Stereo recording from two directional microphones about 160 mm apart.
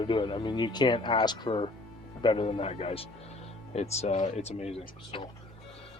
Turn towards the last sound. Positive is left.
turn(degrees=40)  # may be behind; listen again after turning